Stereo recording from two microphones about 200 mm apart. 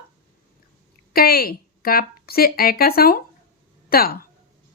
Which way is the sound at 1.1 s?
50° left (ahead or behind).